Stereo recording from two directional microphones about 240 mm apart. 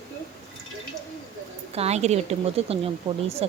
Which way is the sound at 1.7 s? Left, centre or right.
Right.